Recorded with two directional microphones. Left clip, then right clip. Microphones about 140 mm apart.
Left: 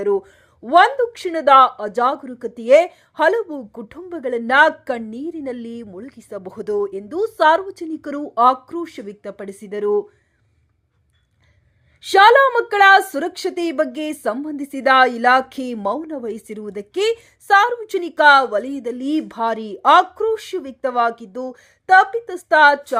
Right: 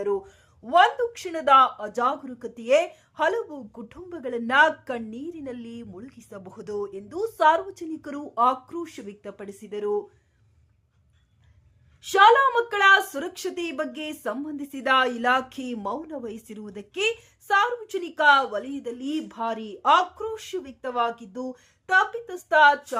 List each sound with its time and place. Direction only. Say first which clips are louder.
0.0 s speech: left 7 dB; 35° left (ahead or behind)
11.9 s a woman's voice: left 6 dB; 45° left (ahead or behind)